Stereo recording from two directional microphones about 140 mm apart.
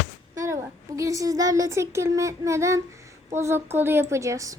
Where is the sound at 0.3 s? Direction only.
20° right (ahead or behind).